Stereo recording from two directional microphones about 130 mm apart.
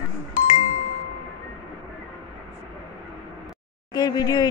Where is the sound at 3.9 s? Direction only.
30° left (ahead or behind).